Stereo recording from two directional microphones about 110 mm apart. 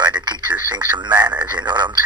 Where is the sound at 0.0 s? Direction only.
40° right (ahead or behind).